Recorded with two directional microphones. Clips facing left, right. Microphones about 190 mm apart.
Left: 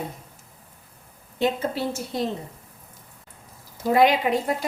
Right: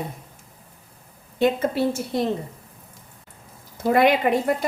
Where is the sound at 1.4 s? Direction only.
55° right (ahead or behind).